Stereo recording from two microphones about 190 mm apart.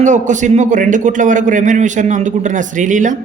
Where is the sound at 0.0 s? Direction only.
40° right (ahead or behind).